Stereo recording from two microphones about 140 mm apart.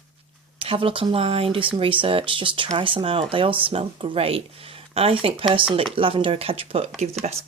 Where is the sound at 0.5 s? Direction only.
40° right (ahead or behind).